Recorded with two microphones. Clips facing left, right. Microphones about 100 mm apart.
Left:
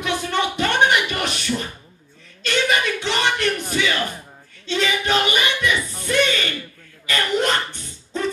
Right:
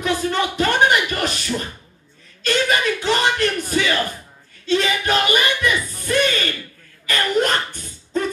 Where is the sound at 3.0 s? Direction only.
40° right (ahead or behind).